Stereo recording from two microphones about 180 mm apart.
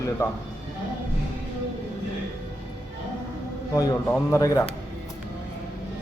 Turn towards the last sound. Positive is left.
turn(degrees=15)  # may be behind; listen again after turning